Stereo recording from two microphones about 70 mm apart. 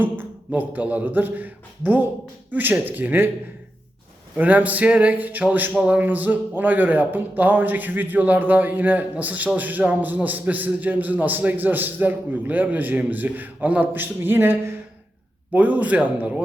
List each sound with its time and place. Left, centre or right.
0.0 s speech: right
4.4 s speech: right
15.5 s speech: centre